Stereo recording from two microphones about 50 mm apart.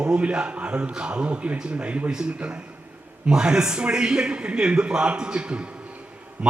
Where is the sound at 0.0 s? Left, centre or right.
Centre.